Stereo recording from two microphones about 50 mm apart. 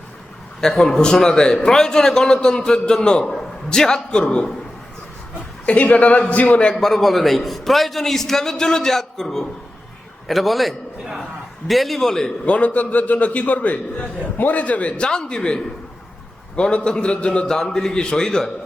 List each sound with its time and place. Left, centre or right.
0.6 s a man's voice: centre
5.6 s a man's voice: left
6.7 s a man's voice: centre
12.5 s a man's voice: left; by 18.5 s centre